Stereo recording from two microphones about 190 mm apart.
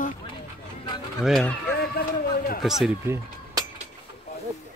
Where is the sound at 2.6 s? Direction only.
Centre (ahead or behind).